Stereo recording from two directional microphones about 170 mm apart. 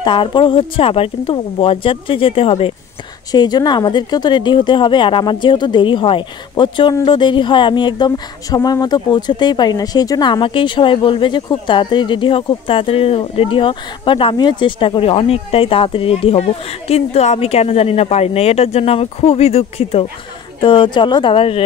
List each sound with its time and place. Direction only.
0.0 s speech: 30° left (ahead or behind)